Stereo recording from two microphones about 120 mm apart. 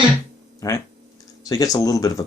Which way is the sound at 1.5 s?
30° left (ahead or behind).